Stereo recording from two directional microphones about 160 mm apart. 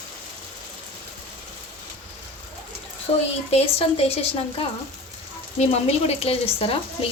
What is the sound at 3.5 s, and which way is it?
Speech, 40° left (ahead or behind).